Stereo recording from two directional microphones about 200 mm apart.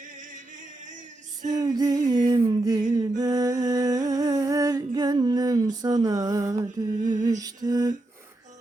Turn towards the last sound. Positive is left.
turn(degrees=-20)  # may be behind; listen again after turning